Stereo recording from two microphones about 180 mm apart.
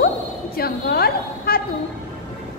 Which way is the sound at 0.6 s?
60° left (ahead or behind).